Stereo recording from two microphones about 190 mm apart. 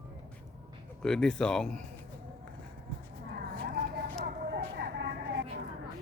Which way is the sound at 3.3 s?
50° right (ahead or behind).